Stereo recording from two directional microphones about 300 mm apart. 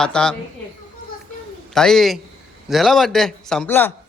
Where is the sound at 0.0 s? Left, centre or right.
Centre.